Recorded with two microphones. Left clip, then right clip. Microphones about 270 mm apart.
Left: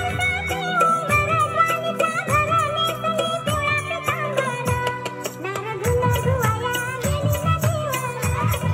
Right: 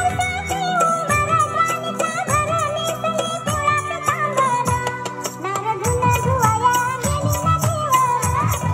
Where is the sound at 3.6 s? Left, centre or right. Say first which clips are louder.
Right 3 dB; right.